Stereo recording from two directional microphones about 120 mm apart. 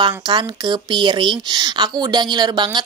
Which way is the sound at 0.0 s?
40° right (ahead or behind).